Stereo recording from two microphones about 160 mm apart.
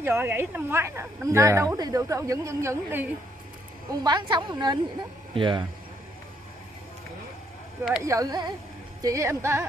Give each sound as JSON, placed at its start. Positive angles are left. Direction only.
{"t": 0.0, "sound": "a woman's voice", "side_deg": -15}
{"t": 3.9, "sound": "a woman's voice", "side_deg": -25}
{"t": 8.0, "sound": "a woman's voice", "side_deg": -20}